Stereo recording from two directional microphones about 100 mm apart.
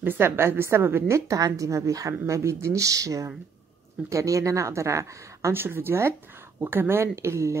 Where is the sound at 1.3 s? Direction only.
35° right (ahead or behind).